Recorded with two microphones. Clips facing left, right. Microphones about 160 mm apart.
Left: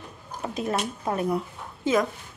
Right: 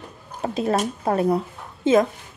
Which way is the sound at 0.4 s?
30° right (ahead or behind).